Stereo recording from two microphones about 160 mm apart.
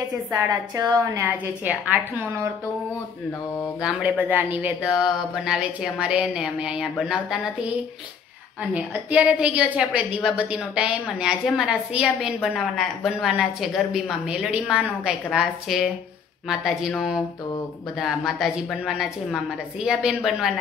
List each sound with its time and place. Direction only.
0.8 s a woman's voice: 20° right (ahead or behind)
3.8 s a woman's voice: 10° right (ahead or behind)
8.7 s a woman's voice: 10° right (ahead or behind)